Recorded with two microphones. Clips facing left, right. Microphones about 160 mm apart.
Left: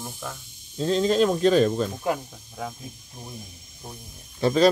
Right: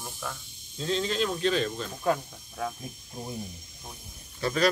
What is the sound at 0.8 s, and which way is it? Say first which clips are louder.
Speech: left 8 dB; 40° left (ahead or behind).